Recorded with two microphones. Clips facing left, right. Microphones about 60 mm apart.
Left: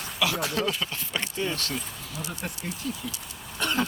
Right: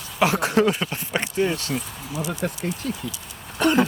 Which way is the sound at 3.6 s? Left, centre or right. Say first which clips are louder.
Right 8 dB; right.